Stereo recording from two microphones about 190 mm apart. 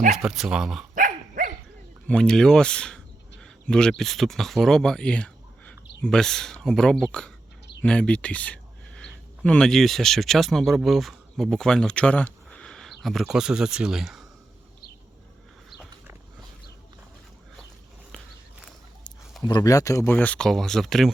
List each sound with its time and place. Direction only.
0.1 s speech: centre (ahead or behind)
0.9 s dog: 45° right (ahead or behind)
2.0 s speech: 5° left (ahead or behind)
19.4 s speech: 20° left (ahead or behind); by 21.1 s centre (ahead or behind)